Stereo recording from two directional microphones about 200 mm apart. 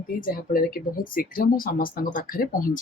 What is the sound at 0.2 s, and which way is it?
Speech, 45° left (ahead or behind).